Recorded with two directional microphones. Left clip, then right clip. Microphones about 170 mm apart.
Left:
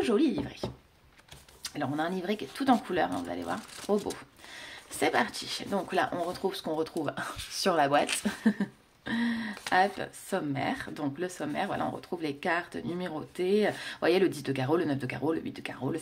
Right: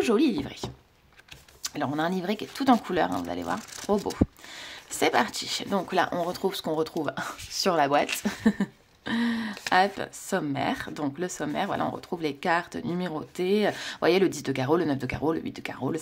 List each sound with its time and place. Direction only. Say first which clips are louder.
0.0 s speech: right 3 dB; 35° right (ahead or behind)